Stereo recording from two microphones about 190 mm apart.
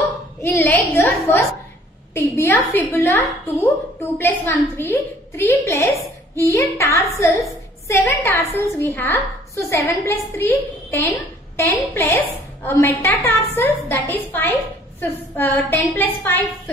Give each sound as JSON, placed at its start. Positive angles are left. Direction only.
{"t": 0.4, "sound": "a woman's voice", "side_deg": 10}